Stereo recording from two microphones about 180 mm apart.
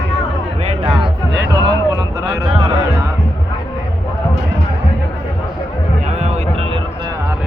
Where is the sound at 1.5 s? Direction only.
20° right (ahead or behind).